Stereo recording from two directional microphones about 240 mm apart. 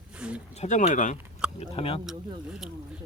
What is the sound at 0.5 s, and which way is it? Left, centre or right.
Speech, left.